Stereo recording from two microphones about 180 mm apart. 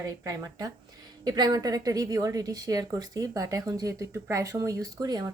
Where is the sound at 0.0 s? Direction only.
15° right (ahead or behind).